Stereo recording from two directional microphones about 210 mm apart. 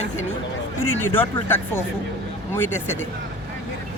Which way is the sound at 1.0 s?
10° left (ahead or behind).